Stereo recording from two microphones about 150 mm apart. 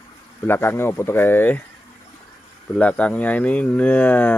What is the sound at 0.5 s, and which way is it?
Speech, 15° left (ahead or behind).